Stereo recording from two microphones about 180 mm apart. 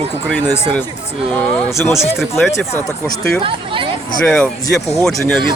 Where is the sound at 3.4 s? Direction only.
30° right (ahead or behind).